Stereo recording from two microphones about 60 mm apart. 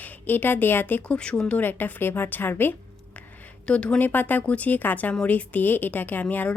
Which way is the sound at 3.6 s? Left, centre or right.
Centre.